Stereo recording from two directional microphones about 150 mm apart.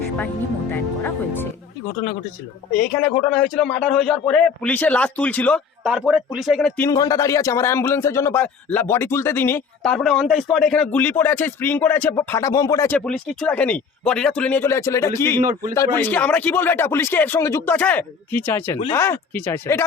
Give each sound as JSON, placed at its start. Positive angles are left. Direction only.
{"t": 0.7, "sound": "speech", "side_deg": 15}
{"t": 2.7, "sound": "speech", "side_deg": 10}
{"t": 5.8, "sound": "speech", "side_deg": -5}
{"t": 6.8, "sound": "speech", "side_deg": 25}
{"t": 9.8, "sound": "speech", "side_deg": 5}
{"t": 13.1, "sound": "speech", "side_deg": 5}